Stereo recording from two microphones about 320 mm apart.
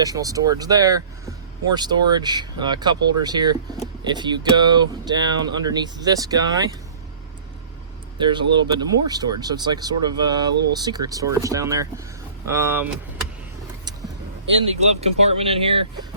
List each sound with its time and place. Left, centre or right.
0.0 s speech: centre
8.2 s speech: centre
14.8 s speech: centre